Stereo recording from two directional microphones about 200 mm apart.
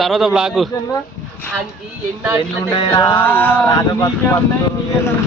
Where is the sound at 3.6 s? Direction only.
20° left (ahead or behind).